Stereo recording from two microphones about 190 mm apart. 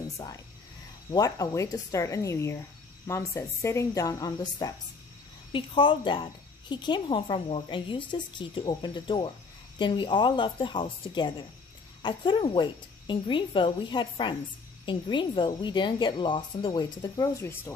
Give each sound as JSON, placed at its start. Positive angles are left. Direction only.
{"t": 1.1, "sound": "a woman's voice", "side_deg": 20}